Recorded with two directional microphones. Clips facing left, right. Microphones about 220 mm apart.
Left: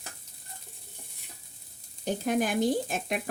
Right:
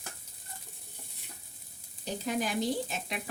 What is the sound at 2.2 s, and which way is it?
Speech, 55° left (ahead or behind).